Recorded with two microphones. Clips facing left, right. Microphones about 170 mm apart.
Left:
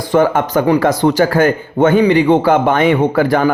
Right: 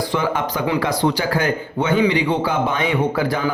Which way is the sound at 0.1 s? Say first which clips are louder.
Left 9 dB; 50° left (ahead or behind).